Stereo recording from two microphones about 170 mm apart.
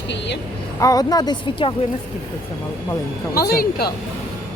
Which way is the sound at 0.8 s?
20° left (ahead or behind).